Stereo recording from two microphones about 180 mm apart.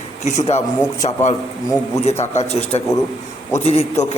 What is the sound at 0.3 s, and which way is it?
A man's voice, 40° left (ahead or behind).